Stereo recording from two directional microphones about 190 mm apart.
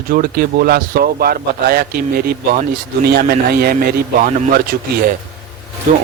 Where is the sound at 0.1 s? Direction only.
50° right (ahead or behind).